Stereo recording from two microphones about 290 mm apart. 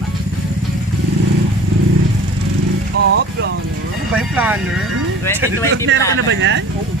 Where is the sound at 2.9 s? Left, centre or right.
Right.